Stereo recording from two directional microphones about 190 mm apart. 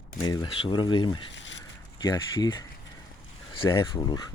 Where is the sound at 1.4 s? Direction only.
80° left.